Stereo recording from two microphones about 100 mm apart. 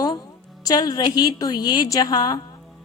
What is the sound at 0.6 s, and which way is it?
A woman's voice, 40° left (ahead or behind).